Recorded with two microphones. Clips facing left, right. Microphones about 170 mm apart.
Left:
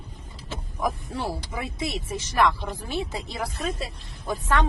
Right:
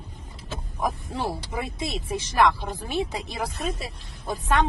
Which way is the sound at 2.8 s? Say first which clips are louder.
Right 3 dB; 15° right (ahead or behind).